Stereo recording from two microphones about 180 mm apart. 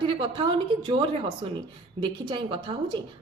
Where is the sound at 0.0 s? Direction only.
25° right (ahead or behind).